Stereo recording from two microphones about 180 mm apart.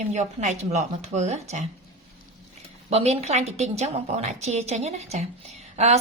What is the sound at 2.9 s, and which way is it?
A woman's voice, 35° right (ahead or behind).